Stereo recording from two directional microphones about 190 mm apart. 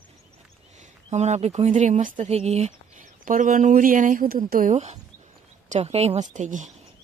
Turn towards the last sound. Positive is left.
turn(degrees=-40)  # may be behind; listen again after turning